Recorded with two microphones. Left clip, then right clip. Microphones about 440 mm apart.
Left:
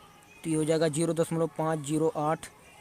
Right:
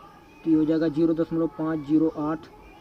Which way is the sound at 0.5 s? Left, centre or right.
Left.